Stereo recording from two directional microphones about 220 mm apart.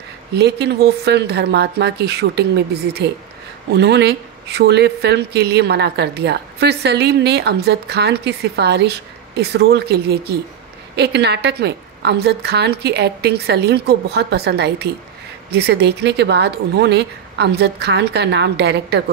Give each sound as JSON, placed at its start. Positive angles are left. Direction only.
{"t": 0.4, "sound": "speech", "side_deg": -50}